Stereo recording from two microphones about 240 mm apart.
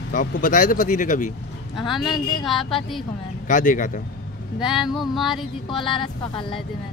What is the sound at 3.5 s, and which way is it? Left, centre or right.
Speech, left.